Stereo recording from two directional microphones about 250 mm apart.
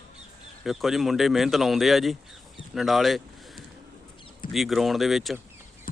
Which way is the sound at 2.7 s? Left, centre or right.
Centre.